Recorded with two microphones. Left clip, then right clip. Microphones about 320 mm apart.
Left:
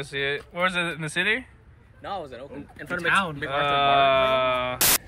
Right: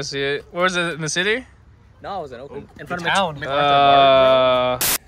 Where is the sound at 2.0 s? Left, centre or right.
Right.